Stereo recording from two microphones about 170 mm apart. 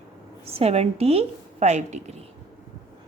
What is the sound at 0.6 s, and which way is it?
A woman's voice, 40° right (ahead or behind).